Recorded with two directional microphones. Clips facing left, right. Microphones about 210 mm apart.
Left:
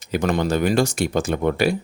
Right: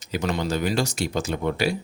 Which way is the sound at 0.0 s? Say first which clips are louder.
Left 5 dB; 55° left (ahead or behind).